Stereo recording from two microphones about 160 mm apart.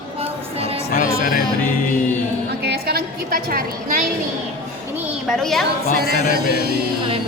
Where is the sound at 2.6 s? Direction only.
90° right; by 4.0 s 65° right (ahead or behind).